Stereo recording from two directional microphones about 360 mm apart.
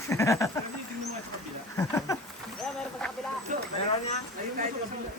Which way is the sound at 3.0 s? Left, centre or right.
Centre.